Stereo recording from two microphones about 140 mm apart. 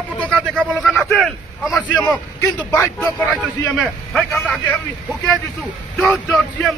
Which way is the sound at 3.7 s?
Centre (ahead or behind).